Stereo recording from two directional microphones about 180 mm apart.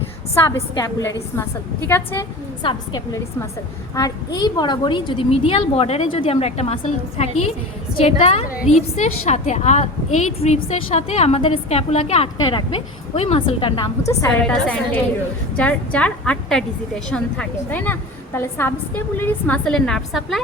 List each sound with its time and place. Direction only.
0.5 s a woman's voice: 15° left (ahead or behind)
2.6 s a woman's voice: 25° left (ahead or behind)
12.4 s a woman's voice: 25° left (ahead or behind)
14.3 s a woman's voice: 5° left (ahead or behind)